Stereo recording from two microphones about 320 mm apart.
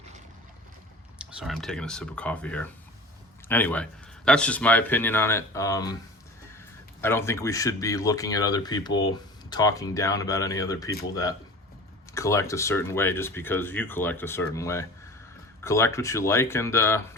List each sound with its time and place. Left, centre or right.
1.2 s speech: centre
7.0 s speech: centre